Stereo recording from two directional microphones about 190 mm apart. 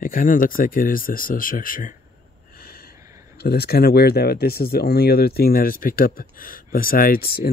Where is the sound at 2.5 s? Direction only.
55° left (ahead or behind).